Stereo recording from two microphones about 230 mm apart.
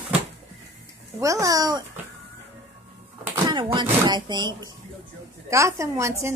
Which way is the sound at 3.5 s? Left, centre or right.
Centre.